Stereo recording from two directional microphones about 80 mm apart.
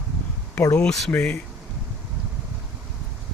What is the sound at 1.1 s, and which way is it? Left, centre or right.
Speech, centre.